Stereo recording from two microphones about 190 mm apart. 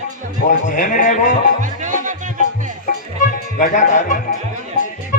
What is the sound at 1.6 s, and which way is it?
Music, 40° right (ahead or behind).